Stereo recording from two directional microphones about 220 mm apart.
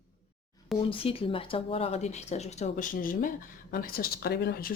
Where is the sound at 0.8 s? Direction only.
25° left (ahead or behind).